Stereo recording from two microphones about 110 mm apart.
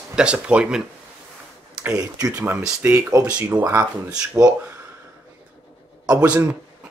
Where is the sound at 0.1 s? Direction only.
10° right (ahead or behind); by 3.3 s 30° right (ahead or behind).